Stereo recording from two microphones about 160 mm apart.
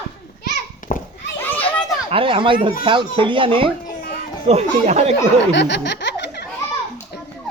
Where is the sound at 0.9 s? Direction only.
60° left (ahead or behind).